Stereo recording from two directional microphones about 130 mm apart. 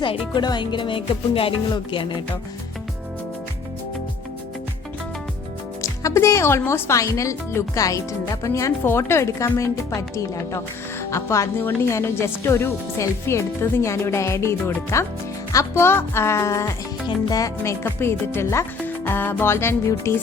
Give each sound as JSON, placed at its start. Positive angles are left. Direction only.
{"t": 0.0, "sound": "music", "side_deg": 40}
{"t": 5.8, "sound": "speech", "side_deg": 25}
{"t": 17.6, "sound": "speech", "side_deg": 15}